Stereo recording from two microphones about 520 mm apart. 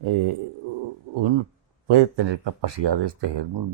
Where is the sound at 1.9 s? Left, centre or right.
Right.